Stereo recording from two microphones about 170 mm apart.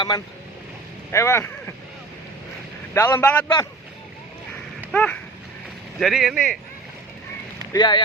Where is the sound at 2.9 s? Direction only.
20° left (ahead or behind).